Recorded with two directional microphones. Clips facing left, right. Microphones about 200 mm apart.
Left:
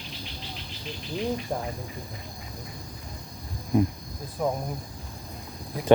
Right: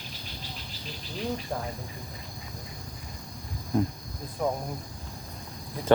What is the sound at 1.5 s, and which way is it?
Speech, 15° left (ahead or behind).